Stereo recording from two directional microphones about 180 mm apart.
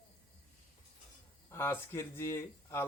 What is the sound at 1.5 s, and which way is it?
Speech, 15° left (ahead or behind).